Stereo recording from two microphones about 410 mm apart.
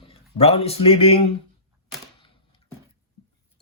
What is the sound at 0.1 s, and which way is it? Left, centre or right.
A man's voice, centre.